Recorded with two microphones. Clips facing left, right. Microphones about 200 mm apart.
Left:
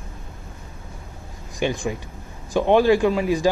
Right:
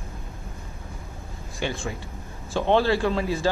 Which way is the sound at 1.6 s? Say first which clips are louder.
Left 6 dB; 15° left (ahead or behind).